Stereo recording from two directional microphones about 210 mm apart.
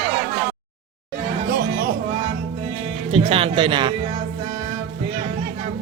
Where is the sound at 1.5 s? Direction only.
45° right (ahead or behind).